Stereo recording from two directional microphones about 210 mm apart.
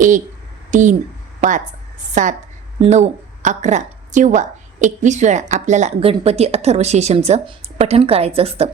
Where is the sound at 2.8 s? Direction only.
30° right (ahead or behind).